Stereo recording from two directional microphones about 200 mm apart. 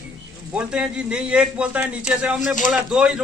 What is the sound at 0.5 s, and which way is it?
A man's voice, 5° right (ahead or behind).